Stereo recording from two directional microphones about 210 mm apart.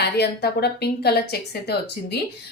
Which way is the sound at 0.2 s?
50° left (ahead or behind).